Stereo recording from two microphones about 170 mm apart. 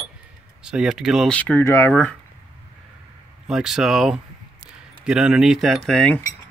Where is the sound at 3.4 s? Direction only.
5° right (ahead or behind).